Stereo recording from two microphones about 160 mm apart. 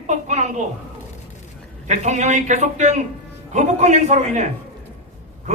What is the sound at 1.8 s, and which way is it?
A man's voice, 45° right (ahead or behind).